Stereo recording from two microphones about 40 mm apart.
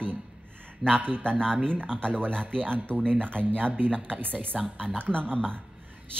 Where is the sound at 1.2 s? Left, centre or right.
Left.